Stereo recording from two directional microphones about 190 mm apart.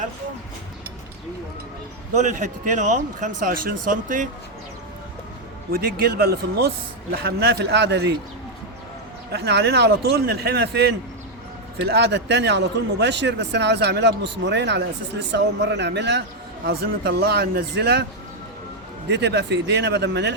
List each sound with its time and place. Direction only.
2.1 s speech: 40° right (ahead or behind)
5.7 s a man's voice: 50° right (ahead or behind)
9.3 s a man's voice: 60° right (ahead or behind)
19.0 s a man's voice: 65° right (ahead or behind)